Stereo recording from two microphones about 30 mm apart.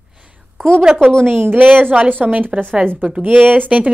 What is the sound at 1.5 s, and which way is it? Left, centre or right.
Speech, right.